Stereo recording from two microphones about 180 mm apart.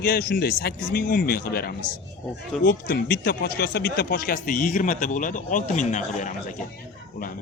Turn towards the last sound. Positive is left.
turn(degrees=45)  # may be behind; listen again after turning